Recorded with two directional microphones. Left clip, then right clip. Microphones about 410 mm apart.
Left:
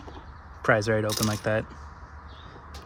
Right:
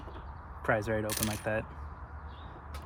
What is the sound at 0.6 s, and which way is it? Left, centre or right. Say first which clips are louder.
Speech: left 7 dB; left.